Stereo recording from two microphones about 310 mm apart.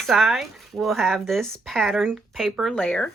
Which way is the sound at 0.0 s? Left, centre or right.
Centre.